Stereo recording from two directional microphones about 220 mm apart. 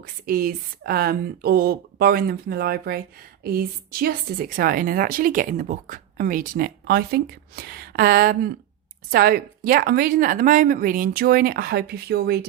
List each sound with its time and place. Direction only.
0.0 s a woman's voice: 40° right (ahead or behind)